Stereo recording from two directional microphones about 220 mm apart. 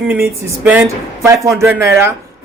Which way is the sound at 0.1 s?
5° right (ahead or behind).